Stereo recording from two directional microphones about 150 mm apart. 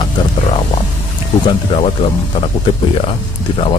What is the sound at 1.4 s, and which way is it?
Speech, 35° left (ahead or behind).